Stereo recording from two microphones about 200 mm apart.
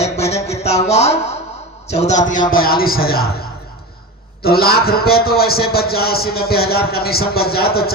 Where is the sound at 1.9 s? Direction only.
35° left (ahead or behind).